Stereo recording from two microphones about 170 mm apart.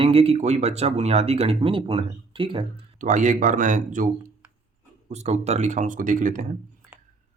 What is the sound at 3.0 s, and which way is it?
Speech, 50° right (ahead or behind).